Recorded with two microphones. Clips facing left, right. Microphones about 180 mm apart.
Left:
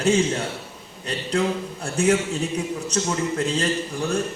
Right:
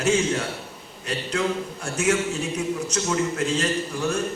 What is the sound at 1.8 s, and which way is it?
Mantra, 35° left (ahead or behind).